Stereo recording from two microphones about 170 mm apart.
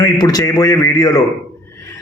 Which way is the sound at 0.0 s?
20° left (ahead or behind).